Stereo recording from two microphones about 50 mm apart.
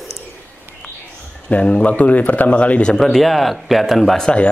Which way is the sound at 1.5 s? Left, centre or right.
Left.